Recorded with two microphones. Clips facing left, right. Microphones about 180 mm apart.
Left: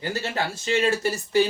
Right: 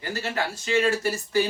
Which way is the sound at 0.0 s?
25° left (ahead or behind).